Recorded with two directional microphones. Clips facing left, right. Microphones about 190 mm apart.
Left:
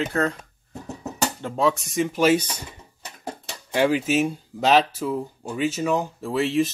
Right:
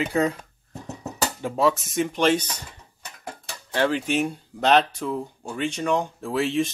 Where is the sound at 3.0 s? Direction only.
25° left (ahead or behind).